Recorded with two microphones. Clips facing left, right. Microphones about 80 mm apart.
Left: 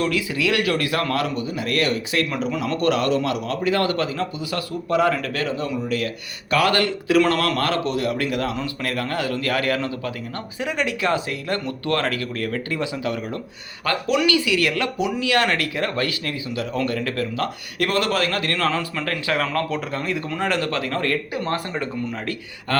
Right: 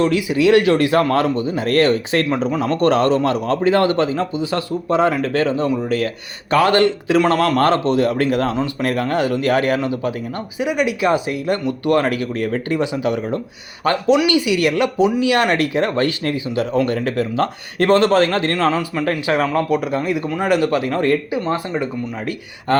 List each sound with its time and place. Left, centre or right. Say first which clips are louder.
0.0 s speech: right 7 dB; right
18.7 s a man's voice: right 5 dB; centre
21.4 s speech: right 4 dB; centre
22.7 s speech: right 6 dB; right